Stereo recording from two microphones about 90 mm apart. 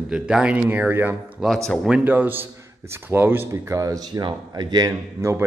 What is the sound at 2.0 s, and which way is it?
Speech, 20° right (ahead or behind).